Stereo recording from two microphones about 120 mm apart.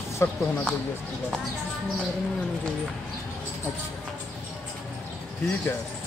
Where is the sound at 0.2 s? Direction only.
25° left (ahead or behind).